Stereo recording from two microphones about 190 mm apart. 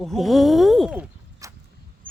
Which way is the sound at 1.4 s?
15° right (ahead or behind).